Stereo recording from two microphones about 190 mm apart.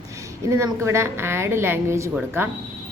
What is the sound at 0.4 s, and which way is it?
A woman's voice, 15° right (ahead or behind).